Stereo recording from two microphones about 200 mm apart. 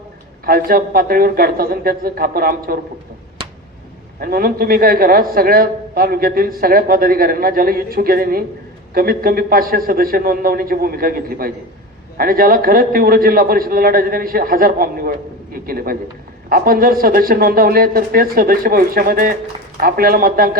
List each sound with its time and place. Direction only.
0.4 s a man's voice: 45° right (ahead or behind)
3.4 s a sound: 25° right (ahead or behind)
4.2 s a man's voice: 45° right (ahead or behind)